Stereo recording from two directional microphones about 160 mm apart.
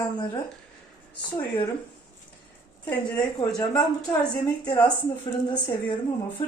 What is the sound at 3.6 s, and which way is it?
A woman's voice, 25° left (ahead or behind).